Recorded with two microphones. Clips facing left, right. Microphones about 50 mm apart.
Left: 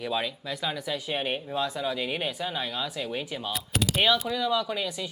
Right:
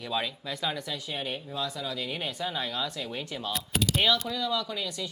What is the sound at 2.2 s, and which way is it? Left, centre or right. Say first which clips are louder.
Speech: left 1 dB; centre.